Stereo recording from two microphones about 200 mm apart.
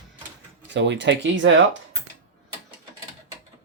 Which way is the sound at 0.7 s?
65° right (ahead or behind).